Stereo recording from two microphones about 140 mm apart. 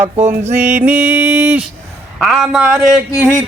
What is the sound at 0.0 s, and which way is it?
Mantra, 50° right (ahead or behind).